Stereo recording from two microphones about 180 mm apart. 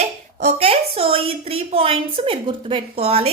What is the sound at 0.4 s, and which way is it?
A woman's voice, 35° right (ahead or behind).